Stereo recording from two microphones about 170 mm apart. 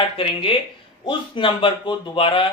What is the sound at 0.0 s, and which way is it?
Speech, 30° left (ahead or behind).